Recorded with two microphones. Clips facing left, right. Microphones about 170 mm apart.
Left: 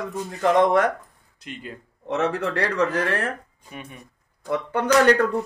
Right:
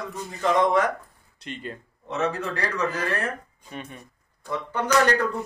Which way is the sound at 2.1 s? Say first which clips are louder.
Left 3 dB; 70° left (ahead or behind).